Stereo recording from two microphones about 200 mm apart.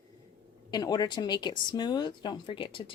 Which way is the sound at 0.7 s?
20° left (ahead or behind).